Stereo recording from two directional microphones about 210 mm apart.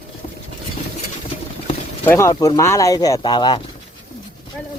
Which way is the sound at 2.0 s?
10° left (ahead or behind).